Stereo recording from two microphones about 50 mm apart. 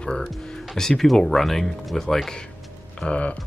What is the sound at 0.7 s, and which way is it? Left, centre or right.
Speech, centre.